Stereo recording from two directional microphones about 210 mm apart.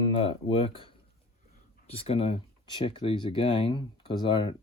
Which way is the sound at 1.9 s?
25° left (ahead or behind).